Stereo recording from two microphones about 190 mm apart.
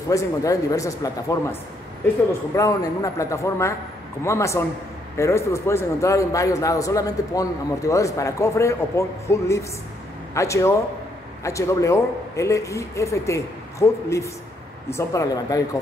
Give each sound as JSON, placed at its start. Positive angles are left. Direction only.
{"t": 0.1, "sound": "a man's voice", "side_deg": 15}